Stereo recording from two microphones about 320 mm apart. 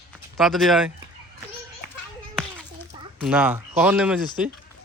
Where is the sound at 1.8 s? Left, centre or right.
Left.